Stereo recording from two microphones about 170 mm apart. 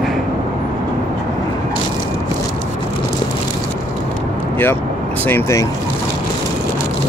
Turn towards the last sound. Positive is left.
turn(degrees=15)  # may be behind; listen again after turning